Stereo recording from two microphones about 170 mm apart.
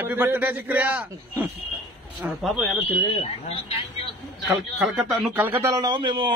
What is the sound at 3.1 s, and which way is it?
Speech, 35° left (ahead or behind).